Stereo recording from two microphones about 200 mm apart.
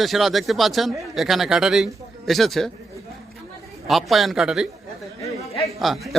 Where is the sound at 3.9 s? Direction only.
Centre (ahead or behind).